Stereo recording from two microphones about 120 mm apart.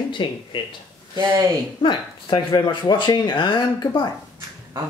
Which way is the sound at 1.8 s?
40° left (ahead or behind).